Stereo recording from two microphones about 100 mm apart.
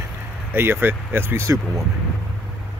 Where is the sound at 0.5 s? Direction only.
20° right (ahead or behind).